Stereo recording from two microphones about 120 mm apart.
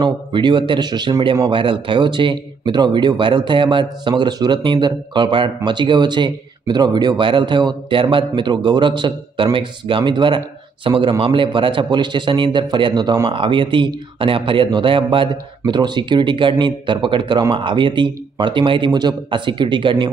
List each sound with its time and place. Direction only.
0.0 s a man's voice: 40° right (ahead or behind)